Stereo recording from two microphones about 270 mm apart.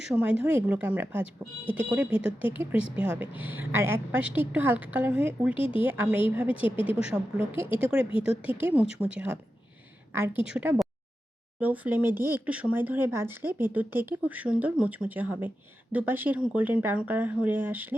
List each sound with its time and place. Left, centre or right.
0.0 s speech: centre
5.5 s speech: centre
5.8 s speech: centre
6.7 s speech: centre
7.1 s speech: centre